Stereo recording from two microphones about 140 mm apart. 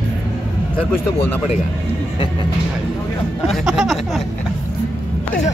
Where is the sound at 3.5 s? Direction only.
5° right (ahead or behind).